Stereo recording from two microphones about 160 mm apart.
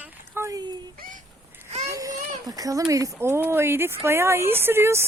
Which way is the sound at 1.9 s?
20° right (ahead or behind).